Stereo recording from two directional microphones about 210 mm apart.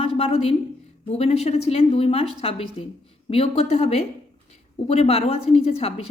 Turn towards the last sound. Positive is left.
turn(degrees=30)  # may be behind; listen again after turning